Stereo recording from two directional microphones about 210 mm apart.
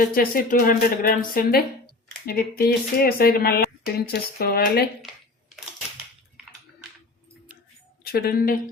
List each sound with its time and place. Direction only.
0.1 s speech: 40° left (ahead or behind)
8.0 s speech: 45° left (ahead or behind)